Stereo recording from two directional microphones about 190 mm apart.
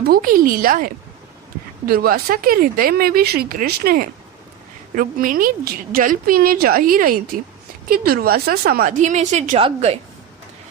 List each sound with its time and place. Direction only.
0.0 s speech: 50° right (ahead or behind); by 10.0 s 30° right (ahead or behind)